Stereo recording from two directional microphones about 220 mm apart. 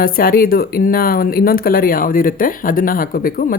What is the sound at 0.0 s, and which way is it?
Speech, 40° left (ahead or behind).